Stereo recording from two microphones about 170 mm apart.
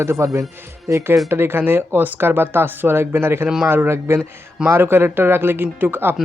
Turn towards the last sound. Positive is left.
turn(degrees=-10)  # may be behind; listen again after turning